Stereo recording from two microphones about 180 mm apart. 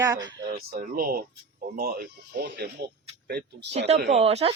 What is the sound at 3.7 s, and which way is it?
Speech, 40° right (ahead or behind).